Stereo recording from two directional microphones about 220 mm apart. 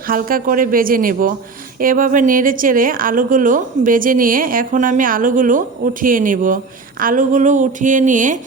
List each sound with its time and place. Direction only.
0.1 s a woman's voice: 40° right (ahead or behind)